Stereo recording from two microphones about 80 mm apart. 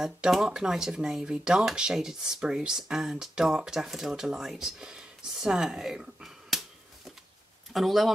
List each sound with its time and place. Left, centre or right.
0.0 s speech: centre
7.7 s speech: centre